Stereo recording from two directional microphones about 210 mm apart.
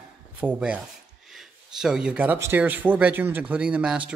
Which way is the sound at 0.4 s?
5° right (ahead or behind).